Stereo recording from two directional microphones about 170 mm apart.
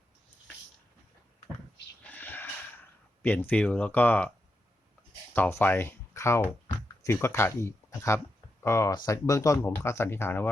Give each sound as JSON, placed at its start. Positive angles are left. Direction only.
{"t": 2.0, "sound": "snort", "side_deg": 10}
{"t": 3.2, "sound": "speech", "side_deg": 10}
{"t": 5.3, "sound": "speech", "side_deg": 10}